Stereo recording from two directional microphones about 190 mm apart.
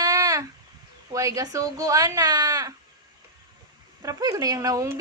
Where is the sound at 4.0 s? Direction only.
20° right (ahead or behind).